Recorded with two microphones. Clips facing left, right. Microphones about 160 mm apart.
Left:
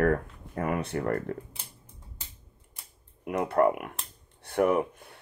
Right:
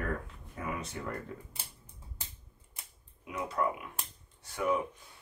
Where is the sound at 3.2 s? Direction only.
60° left (ahead or behind).